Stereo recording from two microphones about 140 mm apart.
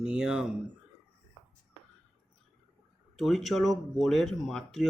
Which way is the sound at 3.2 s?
Centre (ahead or behind).